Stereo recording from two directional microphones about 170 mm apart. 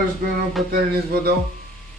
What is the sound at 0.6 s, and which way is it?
Speech, centre (ahead or behind).